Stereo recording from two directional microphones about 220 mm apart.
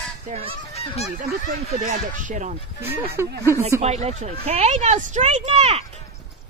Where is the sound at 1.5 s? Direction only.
35° right (ahead or behind).